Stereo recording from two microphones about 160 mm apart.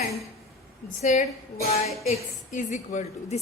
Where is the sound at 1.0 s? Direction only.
50° left (ahead or behind).